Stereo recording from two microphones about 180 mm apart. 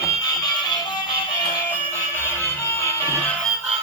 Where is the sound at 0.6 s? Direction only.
25° left (ahead or behind).